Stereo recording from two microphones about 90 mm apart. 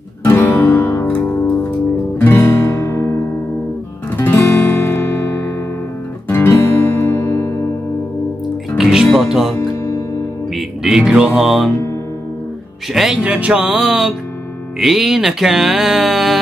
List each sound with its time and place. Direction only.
0.4 s guitar: 30° left (ahead or behind)
2.1 s guitar: 25° left (ahead or behind)
4.2 s music: 25° left (ahead or behind)
6.2 s guitar: 25° left (ahead or behind)
8.7 s music: 5° right (ahead or behind)
9.6 s music: 35° left (ahead or behind)
10.5 s music: 5° right (ahead or behind)
12.9 s speech: 10° right (ahead or behind)
13.7 s music: 5° right (ahead or behind)